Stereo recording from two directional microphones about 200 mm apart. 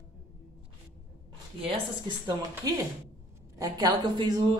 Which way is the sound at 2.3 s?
20° right (ahead or behind).